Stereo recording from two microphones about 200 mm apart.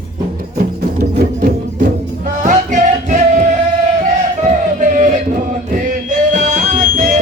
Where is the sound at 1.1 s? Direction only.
40° right (ahead or behind).